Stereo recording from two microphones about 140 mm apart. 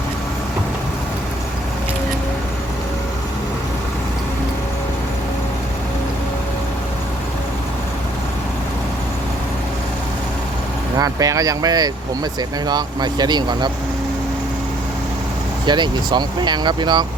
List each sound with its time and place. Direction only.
10.9 s speech: 25° right (ahead or behind)
15.6 s speech: 35° right (ahead or behind)